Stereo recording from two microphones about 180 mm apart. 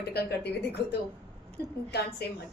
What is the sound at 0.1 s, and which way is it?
Speech, 65° left (ahead or behind).